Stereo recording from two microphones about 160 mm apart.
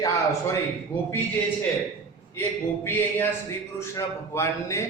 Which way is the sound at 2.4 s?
15° left (ahead or behind).